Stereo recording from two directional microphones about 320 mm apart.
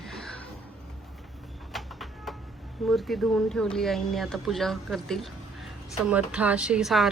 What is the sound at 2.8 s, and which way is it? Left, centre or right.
Speech, centre.